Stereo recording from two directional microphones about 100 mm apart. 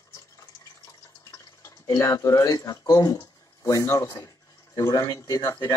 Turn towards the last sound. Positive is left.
turn(degrees=40)  # may be behind; listen again after turning